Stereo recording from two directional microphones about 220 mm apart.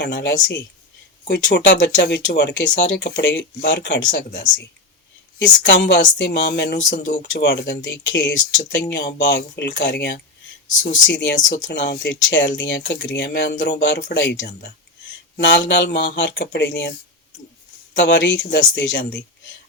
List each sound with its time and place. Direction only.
0.0 s speech: 50° left (ahead or behind)
4.3 s speech: 40° left (ahead or behind)
5.4 s speech: 50° left (ahead or behind)
10.7 s speech: 35° left (ahead or behind)
11.0 s speech: 55° left (ahead or behind)
11.3 s speech: 35° left (ahead or behind)
11.7 s speech: 50° left (ahead or behind)
17.9 s speech: 55° left (ahead or behind)